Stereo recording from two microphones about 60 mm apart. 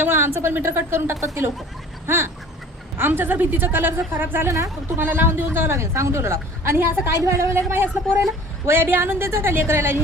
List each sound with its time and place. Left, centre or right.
0.0 s a woman's voice: right